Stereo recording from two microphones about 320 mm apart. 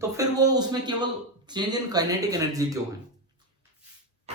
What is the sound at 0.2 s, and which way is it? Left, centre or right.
A man's voice, centre.